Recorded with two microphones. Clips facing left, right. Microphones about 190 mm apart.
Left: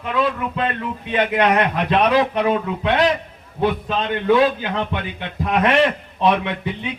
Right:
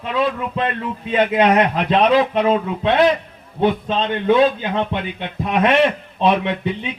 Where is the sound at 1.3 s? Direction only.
20° right (ahead or behind).